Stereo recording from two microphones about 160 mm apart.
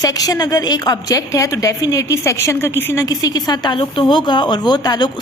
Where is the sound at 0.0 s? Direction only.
25° left (ahead or behind).